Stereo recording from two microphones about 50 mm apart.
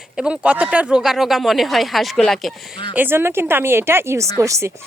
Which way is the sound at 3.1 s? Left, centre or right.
Right.